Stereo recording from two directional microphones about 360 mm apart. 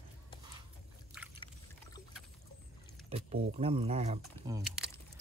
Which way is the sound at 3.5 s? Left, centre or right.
Centre.